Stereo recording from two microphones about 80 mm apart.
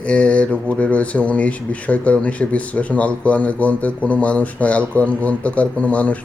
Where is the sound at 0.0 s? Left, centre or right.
Centre.